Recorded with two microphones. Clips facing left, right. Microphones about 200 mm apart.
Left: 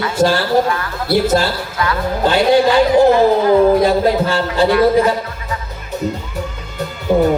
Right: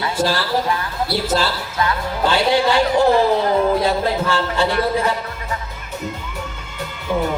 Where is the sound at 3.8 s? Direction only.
35° left (ahead or behind).